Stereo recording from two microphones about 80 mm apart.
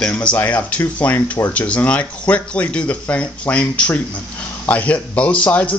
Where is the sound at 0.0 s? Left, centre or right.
Centre.